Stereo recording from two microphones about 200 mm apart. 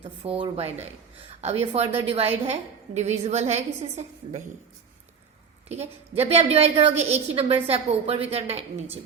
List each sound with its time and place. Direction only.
0.0 s a woman's voice: 25° right (ahead or behind)
5.6 s a woman's voice: 35° right (ahead or behind)